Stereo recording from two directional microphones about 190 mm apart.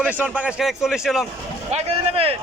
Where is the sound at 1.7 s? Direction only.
30° right (ahead or behind).